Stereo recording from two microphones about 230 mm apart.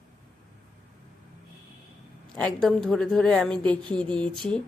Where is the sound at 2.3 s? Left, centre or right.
Centre.